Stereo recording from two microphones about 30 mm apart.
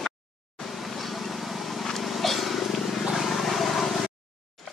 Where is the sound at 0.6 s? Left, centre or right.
Centre.